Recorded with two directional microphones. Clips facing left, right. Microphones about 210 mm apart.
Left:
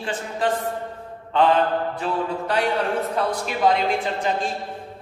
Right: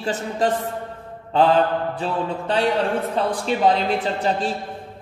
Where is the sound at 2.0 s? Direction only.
30° right (ahead or behind).